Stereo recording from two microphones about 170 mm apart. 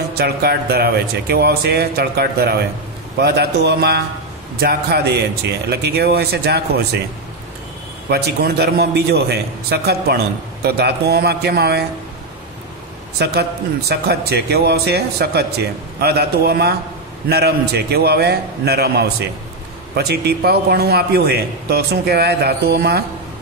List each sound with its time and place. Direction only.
0.2 s a man's voice: 70° right (ahead or behind)
8.1 s a man's voice: 70° right (ahead or behind)
13.2 s a man's voice: 75° right (ahead or behind)